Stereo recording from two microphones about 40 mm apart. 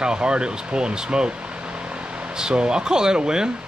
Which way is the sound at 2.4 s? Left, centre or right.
Right.